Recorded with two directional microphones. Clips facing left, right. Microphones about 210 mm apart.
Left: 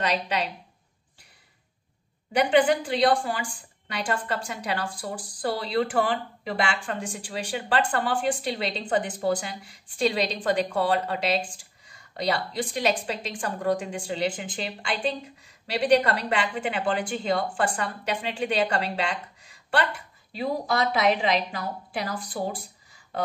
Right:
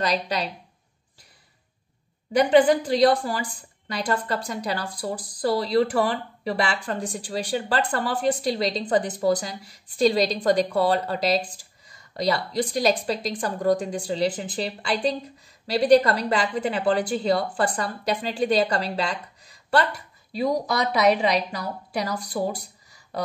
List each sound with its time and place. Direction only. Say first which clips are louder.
0.0 s a woman's voice: right 1 dB; 35° right (ahead or behind)
2.3 s a woman's voice: right 4 dB; 40° right (ahead or behind)